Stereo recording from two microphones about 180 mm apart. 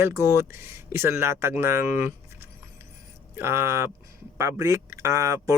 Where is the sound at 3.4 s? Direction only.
15° right (ahead or behind).